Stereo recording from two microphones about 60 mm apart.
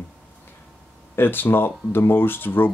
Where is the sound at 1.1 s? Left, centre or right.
Left.